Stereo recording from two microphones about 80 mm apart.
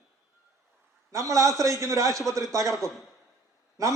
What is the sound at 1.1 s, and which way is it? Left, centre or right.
A man's voice, right.